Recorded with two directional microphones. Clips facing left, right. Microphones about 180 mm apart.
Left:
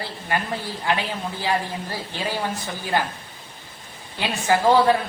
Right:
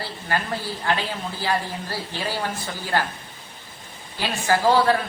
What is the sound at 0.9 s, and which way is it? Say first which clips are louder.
A woman's voice: left 1 dB; 15° left (ahead or behind).